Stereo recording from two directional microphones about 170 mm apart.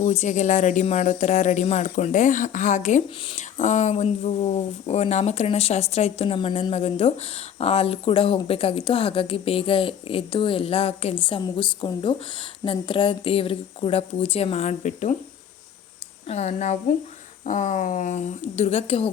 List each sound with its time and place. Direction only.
0.0 s speech: 45° left (ahead or behind)
16.2 s speech: 40° left (ahead or behind)